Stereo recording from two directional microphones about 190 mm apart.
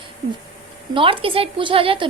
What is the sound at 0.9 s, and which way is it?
A woman's voice, 30° right (ahead or behind).